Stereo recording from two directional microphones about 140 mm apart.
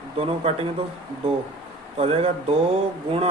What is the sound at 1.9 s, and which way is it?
Speech, 45° right (ahead or behind).